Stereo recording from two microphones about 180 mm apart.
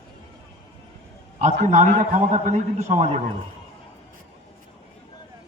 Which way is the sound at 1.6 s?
45° right (ahead or behind).